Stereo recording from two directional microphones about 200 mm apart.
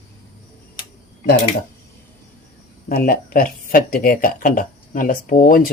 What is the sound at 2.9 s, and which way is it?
Speech, 45° left (ahead or behind).